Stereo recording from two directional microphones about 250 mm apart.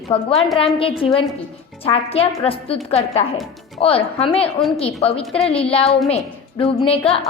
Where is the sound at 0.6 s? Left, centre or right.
Left.